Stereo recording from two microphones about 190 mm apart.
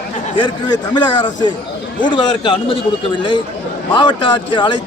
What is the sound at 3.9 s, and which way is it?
Speech, 25° left (ahead or behind).